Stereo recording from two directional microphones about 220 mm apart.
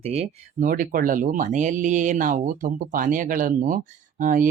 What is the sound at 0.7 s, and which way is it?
Speech, 40° right (ahead or behind).